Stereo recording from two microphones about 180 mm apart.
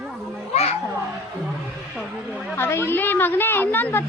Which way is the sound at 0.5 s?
35° left (ahead or behind).